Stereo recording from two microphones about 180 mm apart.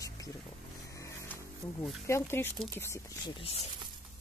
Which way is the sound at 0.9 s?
15° left (ahead or behind).